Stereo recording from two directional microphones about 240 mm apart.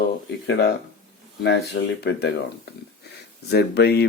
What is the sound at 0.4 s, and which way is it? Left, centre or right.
Speech, left.